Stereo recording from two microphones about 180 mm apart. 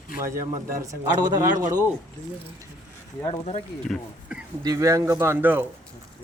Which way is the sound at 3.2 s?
30° left (ahead or behind).